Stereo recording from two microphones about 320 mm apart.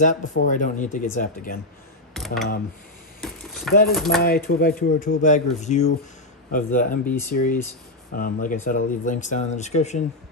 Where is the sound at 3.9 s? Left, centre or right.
Centre.